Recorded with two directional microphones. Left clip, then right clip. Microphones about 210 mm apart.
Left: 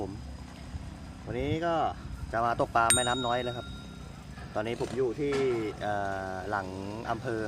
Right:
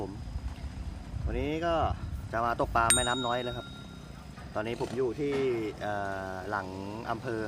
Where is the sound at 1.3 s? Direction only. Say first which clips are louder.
Even; 5° right (ahead or behind).